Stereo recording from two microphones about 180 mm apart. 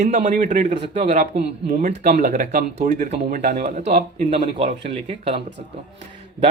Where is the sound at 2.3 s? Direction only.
40° right (ahead or behind).